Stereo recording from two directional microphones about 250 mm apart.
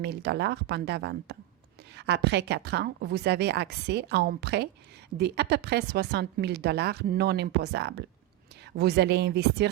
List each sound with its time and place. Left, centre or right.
0.0 s a woman's voice: right